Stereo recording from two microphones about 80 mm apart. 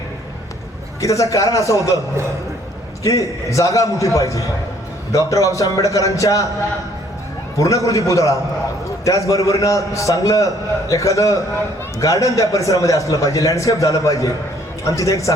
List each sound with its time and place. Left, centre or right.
1.0 s a man's voice: left
3.5 s a man's voice: left
7.6 s a man's voice: left